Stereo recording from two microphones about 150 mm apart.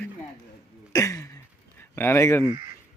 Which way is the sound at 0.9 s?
20° left (ahead or behind).